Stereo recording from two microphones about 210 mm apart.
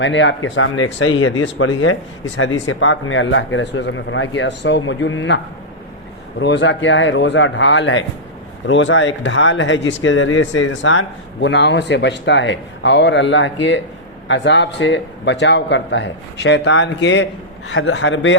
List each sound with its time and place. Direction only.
0.0 s speech: 60° left (ahead or behind)
6.4 s speech: 60° left (ahead or behind)